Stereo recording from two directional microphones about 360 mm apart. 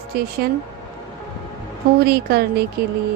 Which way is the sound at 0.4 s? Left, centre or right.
Right.